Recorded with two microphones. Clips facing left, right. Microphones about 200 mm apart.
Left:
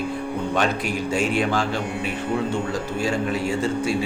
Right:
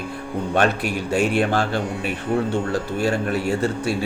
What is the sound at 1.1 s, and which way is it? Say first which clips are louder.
Speech: right 3 dB; 60° right (ahead or behind).